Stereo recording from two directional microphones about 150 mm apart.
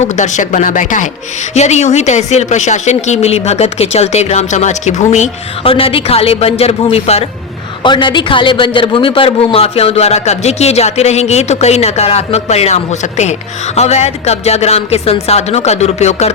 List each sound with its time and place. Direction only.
0.0 s speech: 50° left (ahead or behind)
7.8 s speech: 30° left (ahead or behind); by 16.3 s 45° left (ahead or behind)